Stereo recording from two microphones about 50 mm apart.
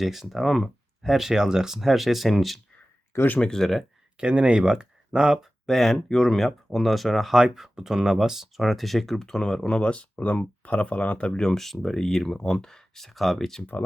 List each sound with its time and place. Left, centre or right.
0.0 s speech: centre
3.3 s speech: centre
3.6 s speech: centre
4.2 s speech: right
5.6 s speech: centre
7.3 s speech: centre; by 11.3 s left
11.3 s speech: centre